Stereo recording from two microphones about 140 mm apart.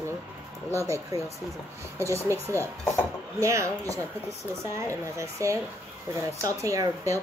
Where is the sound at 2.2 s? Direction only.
20° right (ahead or behind).